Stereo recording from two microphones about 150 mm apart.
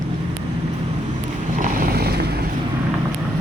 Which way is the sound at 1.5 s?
65° right (ahead or behind).